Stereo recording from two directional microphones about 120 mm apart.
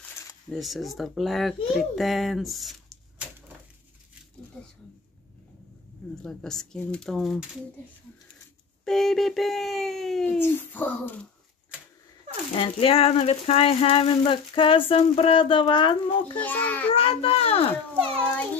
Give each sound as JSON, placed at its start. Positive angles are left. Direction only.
{"t": 0.5, "sound": "a child's voice", "side_deg": 0}
{"t": 6.2, "sound": "a child's voice", "side_deg": 5}
{"t": 8.8, "sound": "a child's voice", "side_deg": 0}
{"t": 10.2, "sound": "a child's voice", "side_deg": 15}
{"t": 12.5, "sound": "a sound", "side_deg": 50}
{"t": 16.3, "sound": "a child's voice", "side_deg": 15}
{"t": 16.9, "sound": "a sound", "side_deg": 50}
{"t": 18.3, "sound": "a child's voice", "side_deg": 10}